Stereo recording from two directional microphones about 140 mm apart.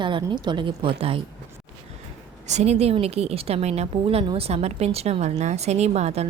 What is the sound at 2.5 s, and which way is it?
A woman's voice, 50° right (ahead or behind).